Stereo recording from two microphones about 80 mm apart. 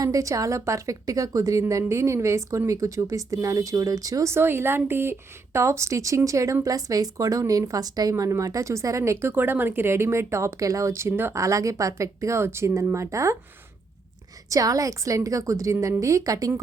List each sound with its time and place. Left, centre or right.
0.0 s a woman's voice: right
8.1 s speech: right
9.3 s speech: right
14.5 s a woman's voice: right